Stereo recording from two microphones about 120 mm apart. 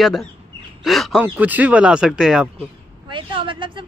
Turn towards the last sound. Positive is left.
turn(degrees=-45)  # may be behind; listen again after turning